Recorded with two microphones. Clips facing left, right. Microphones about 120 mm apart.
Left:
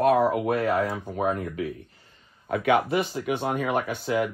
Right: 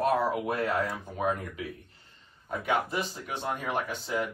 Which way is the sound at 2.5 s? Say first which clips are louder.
Left 7 dB; 65° left (ahead or behind).